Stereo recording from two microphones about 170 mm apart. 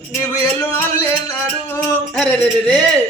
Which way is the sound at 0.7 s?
15° left (ahead or behind).